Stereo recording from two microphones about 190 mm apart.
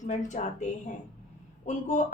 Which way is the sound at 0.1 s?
40° left (ahead or behind).